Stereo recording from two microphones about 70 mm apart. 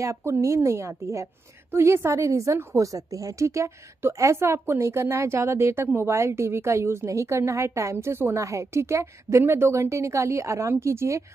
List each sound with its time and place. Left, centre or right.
0.0 s a woman's voice: right